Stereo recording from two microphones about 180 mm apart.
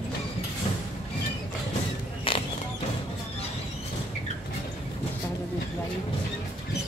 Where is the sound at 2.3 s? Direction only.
30° left (ahead or behind).